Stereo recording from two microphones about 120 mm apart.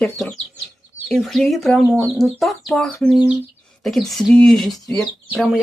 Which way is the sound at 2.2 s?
Centre (ahead or behind).